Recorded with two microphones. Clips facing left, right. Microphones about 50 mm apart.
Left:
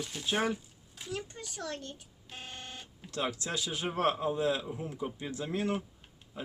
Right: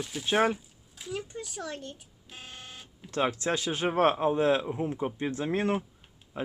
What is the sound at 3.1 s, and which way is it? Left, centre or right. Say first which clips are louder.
Speech: right 7 dB; right.